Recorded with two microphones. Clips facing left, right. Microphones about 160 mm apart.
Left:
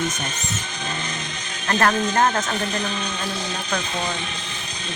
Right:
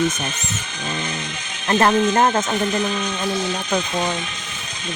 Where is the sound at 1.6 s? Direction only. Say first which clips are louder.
Right 4 dB; 20° right (ahead or behind).